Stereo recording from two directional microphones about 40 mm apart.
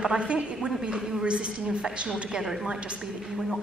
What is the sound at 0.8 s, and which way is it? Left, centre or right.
Speech, centre.